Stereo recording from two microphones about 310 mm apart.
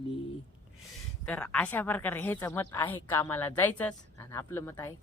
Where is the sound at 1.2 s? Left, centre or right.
Centre.